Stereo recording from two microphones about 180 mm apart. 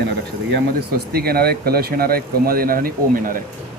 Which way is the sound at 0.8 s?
60° right (ahead or behind).